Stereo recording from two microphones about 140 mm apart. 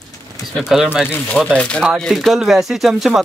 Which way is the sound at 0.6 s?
5° right (ahead or behind).